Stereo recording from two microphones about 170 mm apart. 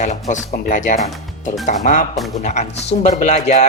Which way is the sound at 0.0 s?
45° left (ahead or behind).